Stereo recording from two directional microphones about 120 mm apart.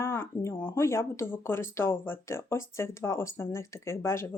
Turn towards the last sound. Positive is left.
turn(degrees=20)  # may be behind; listen again after turning